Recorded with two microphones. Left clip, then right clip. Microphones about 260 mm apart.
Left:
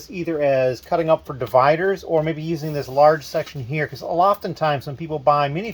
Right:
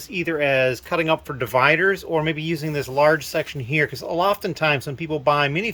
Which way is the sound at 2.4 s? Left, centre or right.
Right.